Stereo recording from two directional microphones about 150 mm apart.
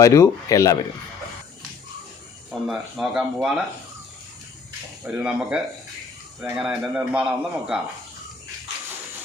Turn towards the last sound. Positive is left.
turn(degrees=-5)  # may be behind; listen again after turning